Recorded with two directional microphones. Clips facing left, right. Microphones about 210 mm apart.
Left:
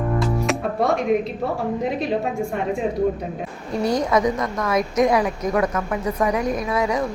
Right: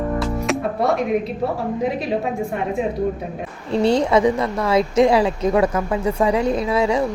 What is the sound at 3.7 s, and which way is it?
A woman's voice, 30° right (ahead or behind).